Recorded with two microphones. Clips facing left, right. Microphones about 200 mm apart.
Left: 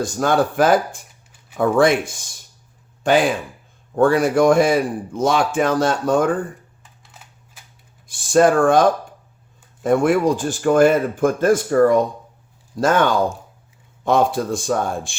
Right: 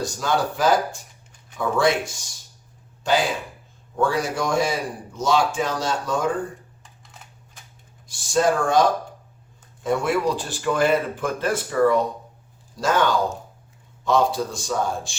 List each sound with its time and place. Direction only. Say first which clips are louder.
0.0 s a man's voice: left 5 dB; 55° left (ahead or behind)
7.0 s camera: even; centre (ahead or behind)
8.0 s speech: left 6 dB; 55° left (ahead or behind)